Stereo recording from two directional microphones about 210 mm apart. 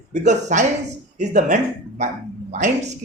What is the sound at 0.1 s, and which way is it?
Speech, 35° right (ahead or behind).